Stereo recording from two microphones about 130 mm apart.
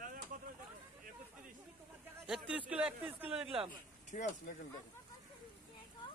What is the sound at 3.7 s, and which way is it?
Speech, 80° left.